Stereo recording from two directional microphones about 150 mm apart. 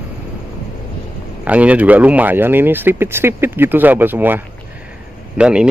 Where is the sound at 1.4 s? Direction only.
10° right (ahead or behind).